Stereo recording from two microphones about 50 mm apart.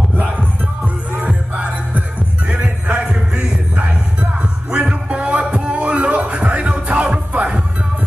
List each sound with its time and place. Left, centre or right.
1.1 s music: right